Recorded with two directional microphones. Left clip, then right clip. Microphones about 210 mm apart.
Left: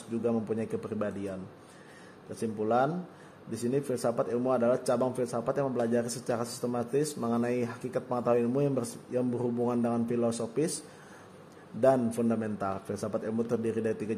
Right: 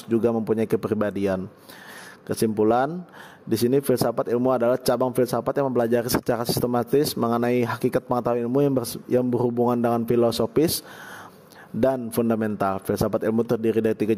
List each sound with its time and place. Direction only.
0.1 s a man's voice: 45° right (ahead or behind)
2.4 s a man's voice: 50° right (ahead or behind)
11.8 s a man's voice: 45° right (ahead or behind)